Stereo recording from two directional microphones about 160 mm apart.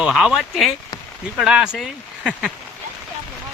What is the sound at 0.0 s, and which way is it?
Speech, 5° right (ahead or behind).